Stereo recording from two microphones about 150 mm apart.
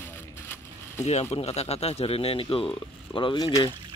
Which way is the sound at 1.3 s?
45° left (ahead or behind).